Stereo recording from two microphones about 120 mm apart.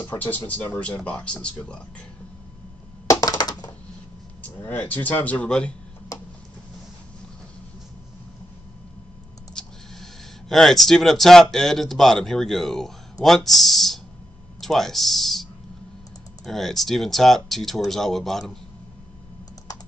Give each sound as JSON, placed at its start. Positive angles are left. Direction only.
{"t": 0.2, "sound": "speech", "side_deg": 15}
{"t": 3.1, "sound": "crushing", "side_deg": 30}
{"t": 4.6, "sound": "speech", "side_deg": 15}
{"t": 6.1, "sound": "a sound", "side_deg": 30}
{"t": 9.5, "sound": "clicking", "side_deg": 5}
{"t": 10.5, "sound": "speech", "side_deg": 0}
{"t": 16.4, "sound": "speech", "side_deg": 0}